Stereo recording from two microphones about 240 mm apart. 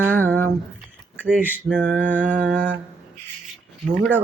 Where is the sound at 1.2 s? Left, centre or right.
Centre.